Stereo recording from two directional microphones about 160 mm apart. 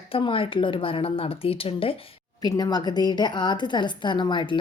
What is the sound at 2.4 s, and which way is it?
A woman's voice, 25° left (ahead or behind).